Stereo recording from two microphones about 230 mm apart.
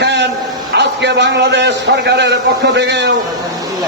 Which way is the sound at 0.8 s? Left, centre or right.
Right.